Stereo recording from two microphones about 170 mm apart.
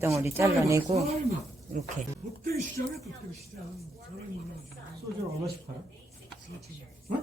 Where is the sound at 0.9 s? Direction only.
40° right (ahead or behind).